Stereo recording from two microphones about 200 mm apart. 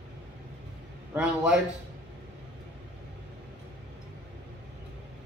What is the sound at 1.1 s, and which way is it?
Speech, 5° right (ahead or behind).